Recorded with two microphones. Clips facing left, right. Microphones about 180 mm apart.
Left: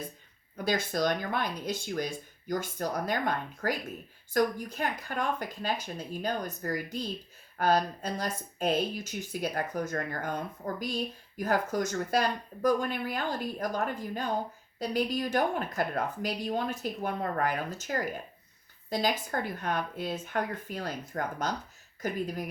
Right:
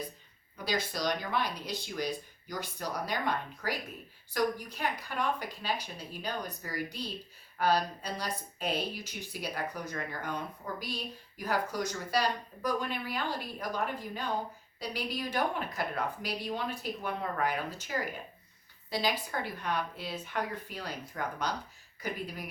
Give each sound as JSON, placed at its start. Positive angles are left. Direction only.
{"t": 0.5, "sound": "speech", "side_deg": 50}